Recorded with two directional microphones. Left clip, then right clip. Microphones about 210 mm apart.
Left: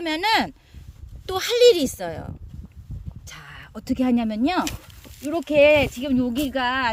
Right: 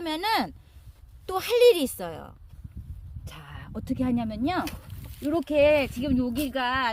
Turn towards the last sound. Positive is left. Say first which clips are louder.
# left 4 dB
turn(degrees=20)  # may be behind; listen again after turning